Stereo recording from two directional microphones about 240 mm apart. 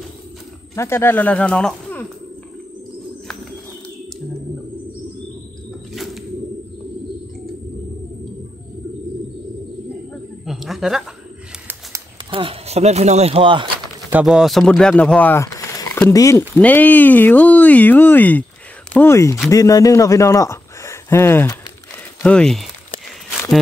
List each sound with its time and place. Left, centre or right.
0.7 s speech: centre
10.4 s a sound: centre
12.3 s speech: right
14.1 s speech: centre